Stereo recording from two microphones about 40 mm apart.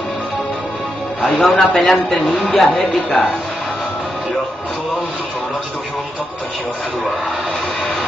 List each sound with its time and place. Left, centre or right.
1.3 s a man's voice: left
2.5 s speech: centre